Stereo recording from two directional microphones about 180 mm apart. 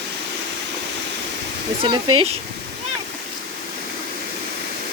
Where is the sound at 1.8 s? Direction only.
30° right (ahead or behind).